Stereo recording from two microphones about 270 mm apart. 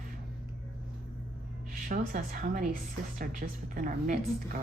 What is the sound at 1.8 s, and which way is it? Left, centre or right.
A woman's voice, right.